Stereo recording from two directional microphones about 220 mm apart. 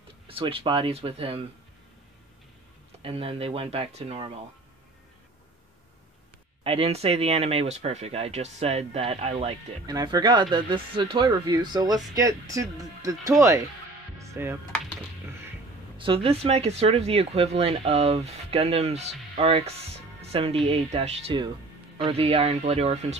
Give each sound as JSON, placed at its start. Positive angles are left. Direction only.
{"t": 0.3, "sound": "speech", "side_deg": -25}
{"t": 3.0, "sound": "speech", "side_deg": -25}
{"t": 6.6, "sound": "speech", "side_deg": -25}
{"t": 16.0, "sound": "speech", "side_deg": -25}